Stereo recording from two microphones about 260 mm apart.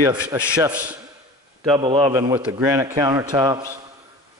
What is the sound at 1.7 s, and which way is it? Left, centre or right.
Speech, centre.